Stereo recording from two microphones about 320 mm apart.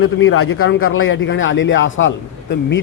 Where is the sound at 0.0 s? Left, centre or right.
Left.